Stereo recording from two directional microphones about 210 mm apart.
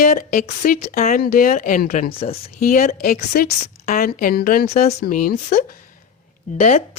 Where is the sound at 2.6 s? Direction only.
45° left (ahead or behind).